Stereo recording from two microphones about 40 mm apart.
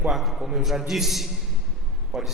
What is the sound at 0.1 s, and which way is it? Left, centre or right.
A man's voice, centre.